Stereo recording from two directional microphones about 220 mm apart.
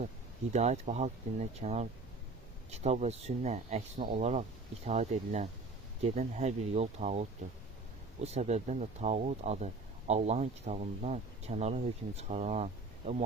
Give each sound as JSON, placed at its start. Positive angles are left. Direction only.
{"t": 0.5, "sound": "speech", "side_deg": -30}